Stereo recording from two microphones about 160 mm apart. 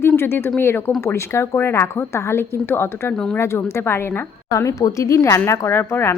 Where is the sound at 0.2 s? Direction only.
15° left (ahead or behind).